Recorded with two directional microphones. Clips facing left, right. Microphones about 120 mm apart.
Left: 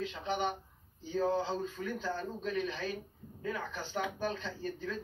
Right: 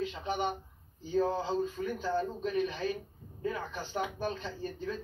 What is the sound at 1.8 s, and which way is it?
Speech, 25° right (ahead or behind).